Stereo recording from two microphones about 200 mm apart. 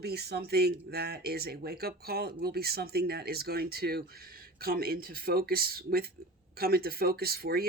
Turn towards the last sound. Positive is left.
turn(degrees=-50)  # may be behind; listen again after turning